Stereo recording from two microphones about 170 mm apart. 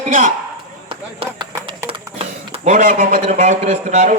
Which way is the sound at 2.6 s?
45° right (ahead or behind).